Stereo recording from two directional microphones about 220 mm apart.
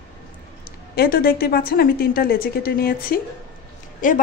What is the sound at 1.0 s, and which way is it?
A woman's voice, 40° left (ahead or behind).